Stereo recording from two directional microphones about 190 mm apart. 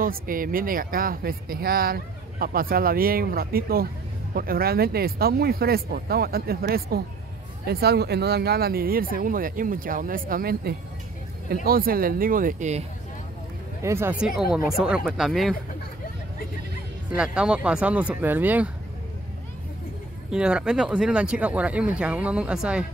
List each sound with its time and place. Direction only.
0.0 s speech: 50° right (ahead or behind)
13.8 s speech: 15° right (ahead or behind)
14.8 s speech: 5° right (ahead or behind)
17.1 s speech: 5° right (ahead or behind)
20.2 s speech: 5° right (ahead or behind)